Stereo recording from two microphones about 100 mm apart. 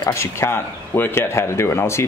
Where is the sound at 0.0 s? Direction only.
30° left (ahead or behind).